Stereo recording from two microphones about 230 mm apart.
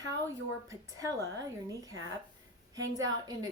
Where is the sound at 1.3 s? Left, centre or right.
Centre.